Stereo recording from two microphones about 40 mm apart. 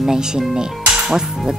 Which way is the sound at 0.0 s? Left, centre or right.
Centre.